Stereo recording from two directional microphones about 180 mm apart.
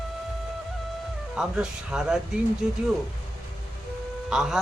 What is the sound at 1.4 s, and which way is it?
Speech, 5° right (ahead or behind).